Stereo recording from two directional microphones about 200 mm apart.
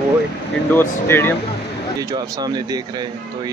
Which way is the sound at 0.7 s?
10° left (ahead or behind).